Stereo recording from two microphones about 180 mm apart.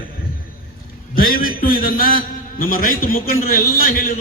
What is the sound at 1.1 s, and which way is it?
A man's voice, 55° left (ahead or behind).